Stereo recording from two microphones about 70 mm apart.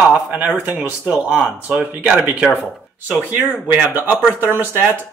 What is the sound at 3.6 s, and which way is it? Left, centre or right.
Speech, right.